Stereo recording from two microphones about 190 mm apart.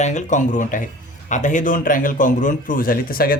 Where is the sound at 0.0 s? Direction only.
40° left (ahead or behind).